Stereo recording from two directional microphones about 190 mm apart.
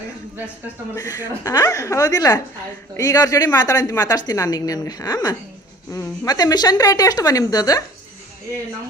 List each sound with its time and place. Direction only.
0.9 s a woman's voice: 15° left (ahead or behind)